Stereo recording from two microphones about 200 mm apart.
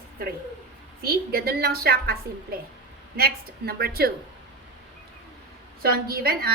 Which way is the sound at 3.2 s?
50° right (ahead or behind).